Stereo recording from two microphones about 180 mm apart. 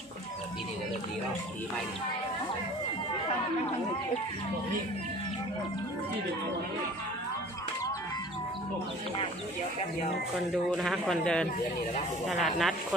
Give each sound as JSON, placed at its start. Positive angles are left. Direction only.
{"t": 10.3, "sound": "speech", "side_deg": 0}